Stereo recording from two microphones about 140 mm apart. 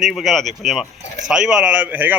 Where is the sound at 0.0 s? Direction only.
Centre (ahead or behind).